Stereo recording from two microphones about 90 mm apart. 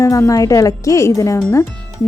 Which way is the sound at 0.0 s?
35° left (ahead or behind).